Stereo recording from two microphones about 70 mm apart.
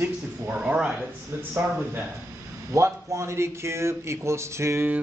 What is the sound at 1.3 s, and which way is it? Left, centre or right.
Speech, right.